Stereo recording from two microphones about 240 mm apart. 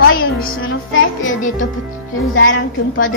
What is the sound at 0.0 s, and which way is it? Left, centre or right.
Music, left.